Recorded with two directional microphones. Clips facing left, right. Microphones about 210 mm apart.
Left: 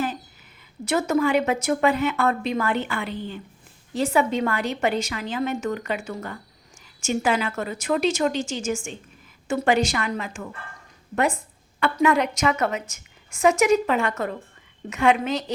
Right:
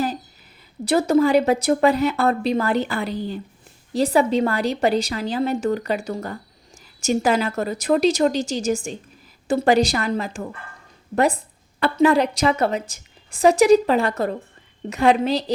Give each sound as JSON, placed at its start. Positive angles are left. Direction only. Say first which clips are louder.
{"t": 0.9, "sound": "a woman's voice", "louder": "right 5 dB", "side_deg": -35}